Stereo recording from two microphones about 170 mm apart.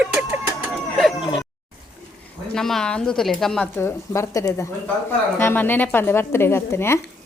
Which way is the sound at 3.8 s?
15° left (ahead or behind).